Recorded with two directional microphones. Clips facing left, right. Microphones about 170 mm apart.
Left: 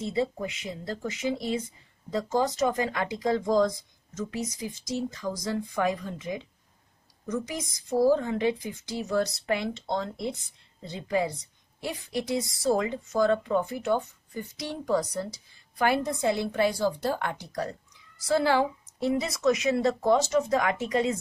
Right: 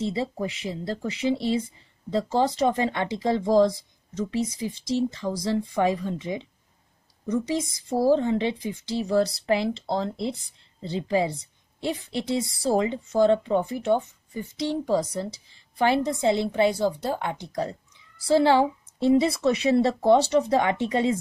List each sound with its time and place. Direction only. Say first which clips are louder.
0.0 s a woman's voice: right 1 dB; 30° right (ahead or behind)